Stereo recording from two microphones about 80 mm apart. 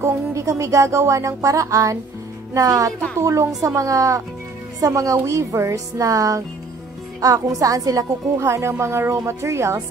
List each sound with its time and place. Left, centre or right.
0.0 s music: right
2.5 s speech: right
3.2 s music: right
4.7 s speech: right
8.5 s music: right